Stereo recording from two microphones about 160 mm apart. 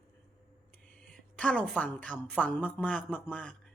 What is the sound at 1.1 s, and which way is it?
A woman's voice, 5° left (ahead or behind).